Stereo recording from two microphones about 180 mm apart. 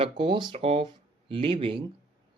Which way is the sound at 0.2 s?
25° right (ahead or behind).